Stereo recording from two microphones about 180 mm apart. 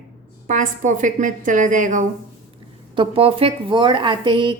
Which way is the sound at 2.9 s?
30° right (ahead or behind).